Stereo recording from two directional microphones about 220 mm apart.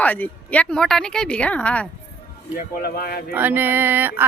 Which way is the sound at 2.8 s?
45° left (ahead or behind).